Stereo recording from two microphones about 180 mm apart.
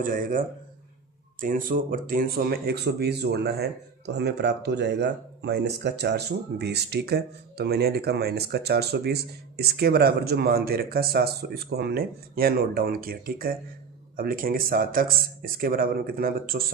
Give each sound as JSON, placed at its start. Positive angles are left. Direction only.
{"t": 0.0, "sound": "speech", "side_deg": -50}